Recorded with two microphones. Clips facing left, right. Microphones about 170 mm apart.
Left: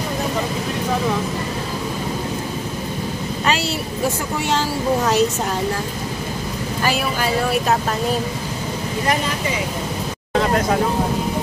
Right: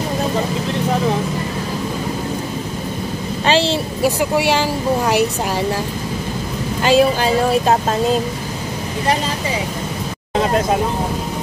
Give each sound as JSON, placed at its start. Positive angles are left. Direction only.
{"t": 3.6, "sound": "speech", "side_deg": -90}
{"t": 6.8, "sound": "speech", "side_deg": -25}
{"t": 10.3, "sound": "vehicle", "side_deg": -20}